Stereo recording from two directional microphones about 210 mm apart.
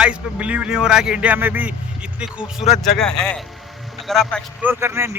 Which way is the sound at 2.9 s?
Centre (ahead or behind).